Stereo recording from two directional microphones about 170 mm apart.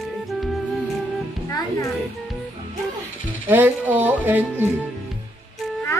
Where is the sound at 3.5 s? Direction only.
10° right (ahead or behind).